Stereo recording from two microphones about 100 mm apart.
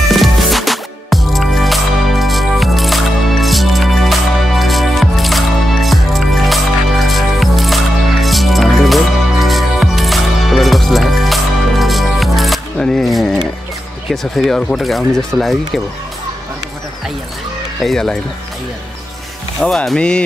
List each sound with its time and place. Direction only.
0.1 s music: centre (ahead or behind)
14.1 s speech: 5° left (ahead or behind)
17.8 s speech: 5° left (ahead or behind)
19.6 s speech: 5° left (ahead or behind)